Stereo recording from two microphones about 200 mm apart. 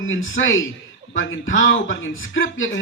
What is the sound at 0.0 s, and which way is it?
A man's voice, 75° left (ahead or behind).